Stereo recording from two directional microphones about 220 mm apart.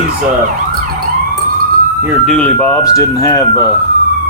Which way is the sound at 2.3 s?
5° left (ahead or behind).